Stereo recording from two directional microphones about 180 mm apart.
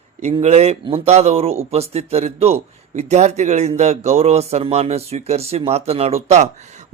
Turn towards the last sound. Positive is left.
turn(degrees=-35)  # may be behind; listen again after turning